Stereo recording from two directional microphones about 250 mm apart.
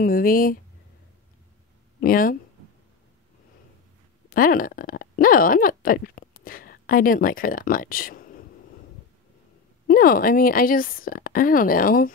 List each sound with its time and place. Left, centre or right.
0.0 s speech: left
2.0 s speech: left
4.3 s speech: left
9.8 s speech: left